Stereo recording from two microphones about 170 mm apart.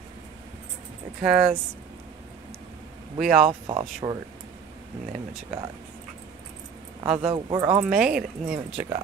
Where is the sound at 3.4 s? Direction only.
35° right (ahead or behind).